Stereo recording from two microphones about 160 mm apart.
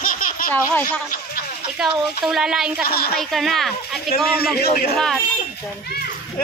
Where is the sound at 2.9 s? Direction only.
75° left (ahead or behind).